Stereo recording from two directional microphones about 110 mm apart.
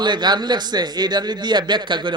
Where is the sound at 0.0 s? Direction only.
45° right (ahead or behind).